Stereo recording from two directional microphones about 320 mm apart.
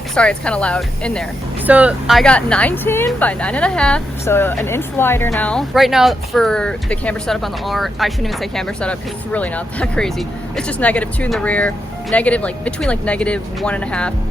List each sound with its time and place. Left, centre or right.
0.1 s speech: centre